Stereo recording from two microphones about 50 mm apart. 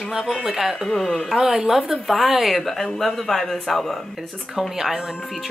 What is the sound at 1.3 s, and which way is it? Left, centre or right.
A woman's voice, centre.